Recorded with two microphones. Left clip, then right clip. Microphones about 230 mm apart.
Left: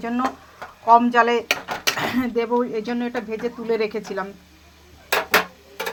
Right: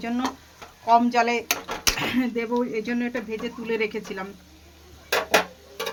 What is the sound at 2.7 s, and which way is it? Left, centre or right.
Speech, centre.